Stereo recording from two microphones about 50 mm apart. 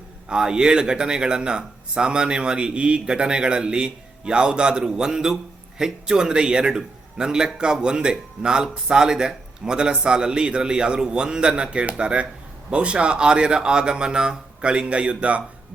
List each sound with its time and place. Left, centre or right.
0.3 s speech: centre